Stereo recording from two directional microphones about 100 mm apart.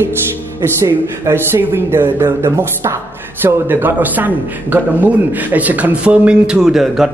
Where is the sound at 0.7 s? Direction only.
30° right (ahead or behind).